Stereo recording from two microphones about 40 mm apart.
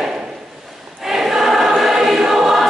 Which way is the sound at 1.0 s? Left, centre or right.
Centre.